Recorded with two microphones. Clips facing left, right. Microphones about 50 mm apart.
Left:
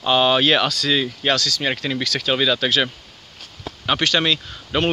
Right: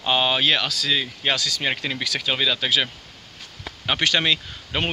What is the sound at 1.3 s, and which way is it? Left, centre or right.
Speech, centre.